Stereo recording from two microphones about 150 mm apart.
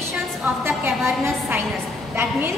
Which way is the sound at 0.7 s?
15° right (ahead or behind).